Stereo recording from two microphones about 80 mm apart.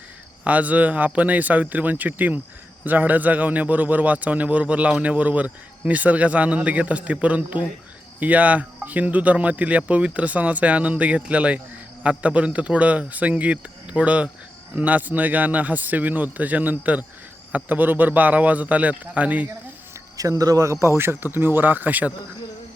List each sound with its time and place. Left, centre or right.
0.4 s speech: centre
20.1 s speech: right